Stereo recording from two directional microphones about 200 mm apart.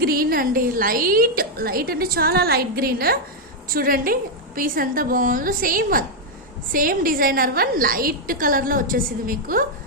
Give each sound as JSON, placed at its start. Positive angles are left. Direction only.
{"t": 0.0, "sound": "a woman's voice", "side_deg": -45}